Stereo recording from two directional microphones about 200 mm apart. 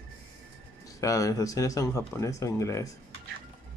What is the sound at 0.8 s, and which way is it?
Speech, 15° left (ahead or behind).